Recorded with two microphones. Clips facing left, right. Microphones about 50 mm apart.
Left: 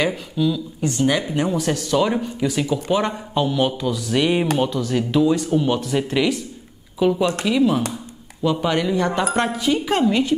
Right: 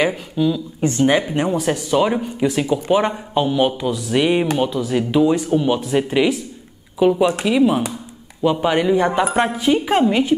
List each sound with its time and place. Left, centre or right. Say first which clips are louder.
0.0 s speech: right 2 dB; centre
0.7 s speech: right 5 dB; right
1.2 s speech: right 2 dB; centre